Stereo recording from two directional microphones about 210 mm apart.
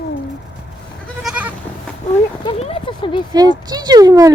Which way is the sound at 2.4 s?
30° left (ahead or behind).